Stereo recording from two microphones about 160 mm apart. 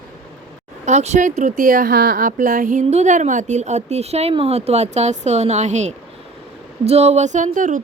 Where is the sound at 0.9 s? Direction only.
45° right (ahead or behind).